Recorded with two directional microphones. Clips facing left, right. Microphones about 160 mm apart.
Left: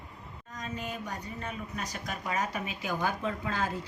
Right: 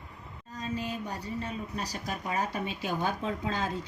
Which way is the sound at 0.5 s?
30° right (ahead or behind).